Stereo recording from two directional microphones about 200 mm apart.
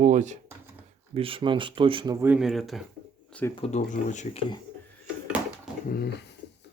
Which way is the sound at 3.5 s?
35° left (ahead or behind).